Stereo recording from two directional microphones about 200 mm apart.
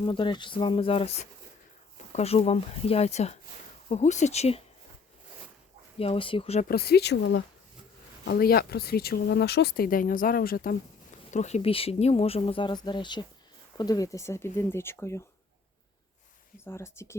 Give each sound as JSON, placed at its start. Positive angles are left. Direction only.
{"t": 0.0, "sound": "speech", "side_deg": 25}
{"t": 6.0, "sound": "speech", "side_deg": 25}
{"t": 6.7, "sound": "speech", "side_deg": 50}
{"t": 11.3, "sound": "speech", "side_deg": 35}
{"t": 16.6, "sound": "speech", "side_deg": 15}